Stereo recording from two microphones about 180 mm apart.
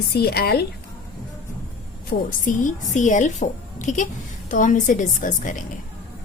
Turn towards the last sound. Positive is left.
turn(degrees=45)  # may be behind; listen again after turning